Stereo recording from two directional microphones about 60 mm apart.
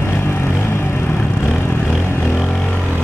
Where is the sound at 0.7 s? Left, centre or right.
Left.